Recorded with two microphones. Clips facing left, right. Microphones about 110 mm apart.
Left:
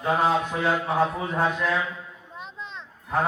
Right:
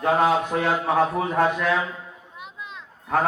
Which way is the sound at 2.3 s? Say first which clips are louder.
Left 1 dB; 10° right (ahead or behind).